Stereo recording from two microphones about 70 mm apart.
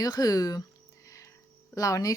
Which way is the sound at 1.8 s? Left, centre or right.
Left.